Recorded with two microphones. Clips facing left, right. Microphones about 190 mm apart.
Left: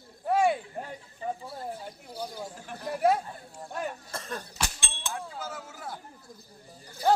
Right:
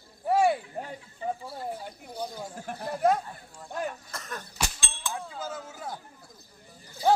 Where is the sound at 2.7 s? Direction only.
50° right (ahead or behind).